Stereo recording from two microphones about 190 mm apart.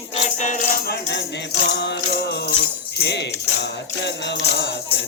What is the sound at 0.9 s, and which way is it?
Music, 65° left (ahead or behind).